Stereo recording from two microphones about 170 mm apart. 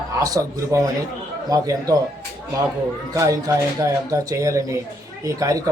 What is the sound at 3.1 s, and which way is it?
A man's voice, 20° right (ahead or behind).